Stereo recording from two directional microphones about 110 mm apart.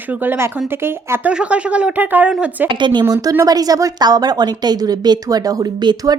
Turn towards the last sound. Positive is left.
turn(degrees=-40)  # may be behind; listen again after turning